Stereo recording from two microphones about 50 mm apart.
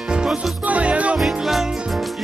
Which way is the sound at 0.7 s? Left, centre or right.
Right.